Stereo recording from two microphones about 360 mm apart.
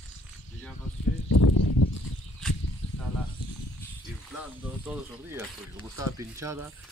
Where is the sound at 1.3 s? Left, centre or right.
Left.